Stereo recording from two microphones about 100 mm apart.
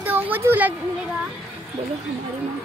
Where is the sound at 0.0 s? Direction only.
20° right (ahead or behind).